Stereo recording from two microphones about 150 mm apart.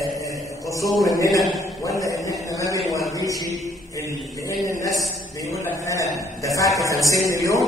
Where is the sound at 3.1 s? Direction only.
25° left (ahead or behind).